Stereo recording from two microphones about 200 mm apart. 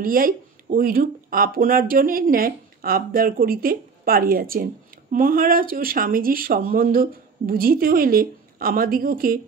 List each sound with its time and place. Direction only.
0.0 s speech: 45° right (ahead or behind)